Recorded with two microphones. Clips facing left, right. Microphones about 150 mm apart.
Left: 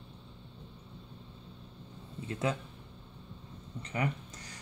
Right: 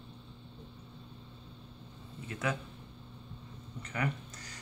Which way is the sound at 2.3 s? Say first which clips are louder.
Left 2 dB; 25° left (ahead or behind).